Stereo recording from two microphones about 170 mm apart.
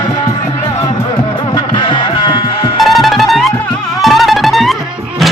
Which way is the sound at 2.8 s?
Centre (ahead or behind).